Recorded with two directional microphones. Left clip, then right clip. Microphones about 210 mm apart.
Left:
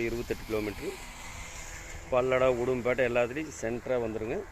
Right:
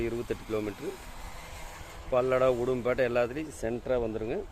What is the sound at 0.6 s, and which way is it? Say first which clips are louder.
Speech: even; 40° right (ahead or behind).